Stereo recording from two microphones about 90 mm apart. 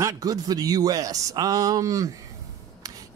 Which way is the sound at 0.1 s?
45° right (ahead or behind).